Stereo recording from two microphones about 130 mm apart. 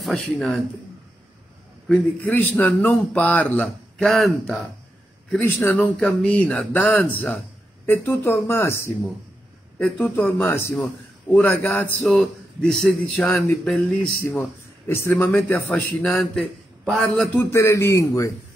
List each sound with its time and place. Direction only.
0.0 s speech: 5° left (ahead or behind)
1.9 s a man's voice: 15° left (ahead or behind)
5.3 s a man's voice: 15° left (ahead or behind)
12.2 s a man's voice: centre (ahead or behind)
14.9 s a man's voice: 20° left (ahead or behind)
17.4 s speech: 20° left (ahead or behind)